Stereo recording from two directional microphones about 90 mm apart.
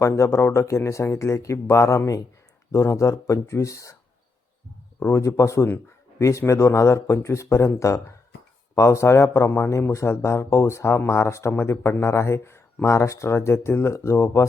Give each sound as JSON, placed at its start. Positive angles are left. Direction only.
{"t": 0.0, "sound": "speech", "side_deg": 35}
{"t": 4.9, "sound": "speech", "side_deg": 30}